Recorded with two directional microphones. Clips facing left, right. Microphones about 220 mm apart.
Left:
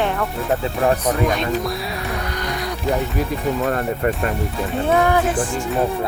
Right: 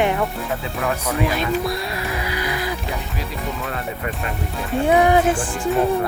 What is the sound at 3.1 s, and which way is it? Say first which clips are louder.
Speech: left 7 dB; 45° left (ahead or behind).